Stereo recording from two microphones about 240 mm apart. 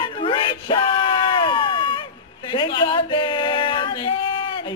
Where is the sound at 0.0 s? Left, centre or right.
Left.